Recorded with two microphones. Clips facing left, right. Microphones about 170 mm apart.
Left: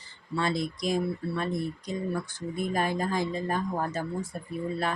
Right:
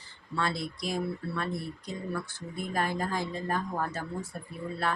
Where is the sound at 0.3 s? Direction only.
20° left (ahead or behind).